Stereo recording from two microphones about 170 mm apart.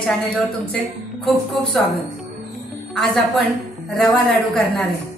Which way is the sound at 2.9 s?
5° left (ahead or behind).